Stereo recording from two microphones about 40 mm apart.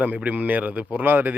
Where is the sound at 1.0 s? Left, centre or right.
Right.